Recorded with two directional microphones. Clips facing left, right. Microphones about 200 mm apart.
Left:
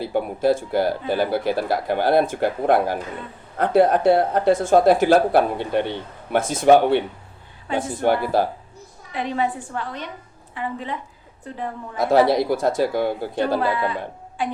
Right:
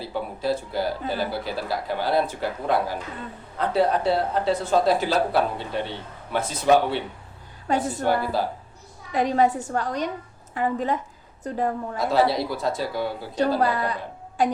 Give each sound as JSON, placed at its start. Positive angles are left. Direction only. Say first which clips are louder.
{"t": 0.0, "sound": "speech", "louder": "left 7 dB", "side_deg": 55}
{"t": 7.7, "sound": "speech", "louder": "right 1 dB", "side_deg": -40}
{"t": 8.0, "sound": "speech", "louder": "left 8 dB", "side_deg": 55}
{"t": 9.1, "sound": "a woman's voice", "louder": "right 4 dB", "side_deg": -40}
{"t": 11.9, "sound": "speech", "louder": "left 6 dB", "side_deg": 55}
{"t": 13.6, "sound": "a woman's voice", "louder": "left 1 dB", "side_deg": -40}